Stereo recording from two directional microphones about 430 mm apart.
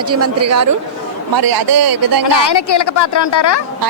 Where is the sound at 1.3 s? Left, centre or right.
Right.